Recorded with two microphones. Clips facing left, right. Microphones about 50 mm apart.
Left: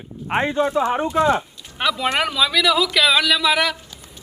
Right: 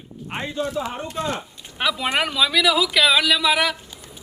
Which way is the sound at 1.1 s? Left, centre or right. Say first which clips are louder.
Left 9 dB; left.